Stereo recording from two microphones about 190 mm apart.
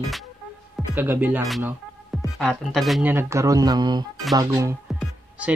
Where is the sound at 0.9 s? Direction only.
10° right (ahead or behind).